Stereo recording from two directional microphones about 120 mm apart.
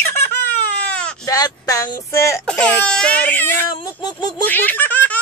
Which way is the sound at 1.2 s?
30° left (ahead or behind).